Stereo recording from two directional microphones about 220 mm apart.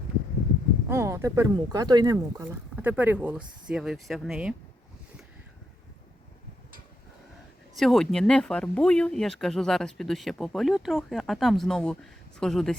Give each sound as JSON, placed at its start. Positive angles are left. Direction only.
{"t": 0.9, "sound": "speech", "side_deg": -15}
{"t": 7.8, "sound": "speech", "side_deg": 0}